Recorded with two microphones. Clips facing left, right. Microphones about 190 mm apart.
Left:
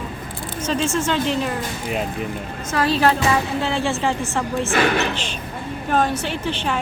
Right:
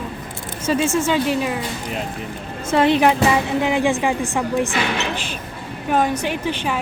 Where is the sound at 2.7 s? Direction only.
20° right (ahead or behind).